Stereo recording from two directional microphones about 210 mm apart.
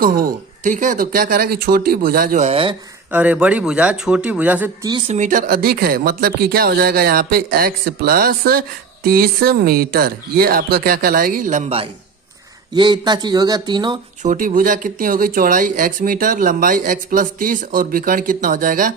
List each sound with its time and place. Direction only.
0.0 s speech: 45° right (ahead or behind); by 2.7 s 25° right (ahead or behind)
3.1 s a man's voice: 5° right (ahead or behind)
4.9 s speech: 25° right (ahead or behind)
14.2 s speech: 40° right (ahead or behind)